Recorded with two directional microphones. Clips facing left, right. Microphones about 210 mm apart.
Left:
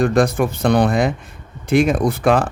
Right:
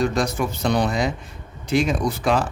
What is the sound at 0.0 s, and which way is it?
Speech, 55° left (ahead or behind).